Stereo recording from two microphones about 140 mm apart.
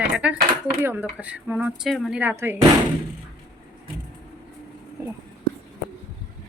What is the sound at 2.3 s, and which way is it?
Speech, 15° right (ahead or behind).